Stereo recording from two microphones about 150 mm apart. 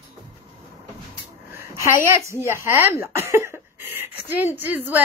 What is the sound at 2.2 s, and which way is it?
Speech, 20° right (ahead or behind).